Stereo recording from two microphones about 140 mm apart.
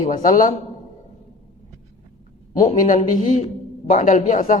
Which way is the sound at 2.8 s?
70° left (ahead or behind).